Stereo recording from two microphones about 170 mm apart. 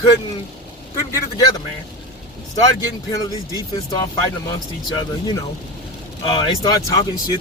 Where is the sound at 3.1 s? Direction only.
20° left (ahead or behind).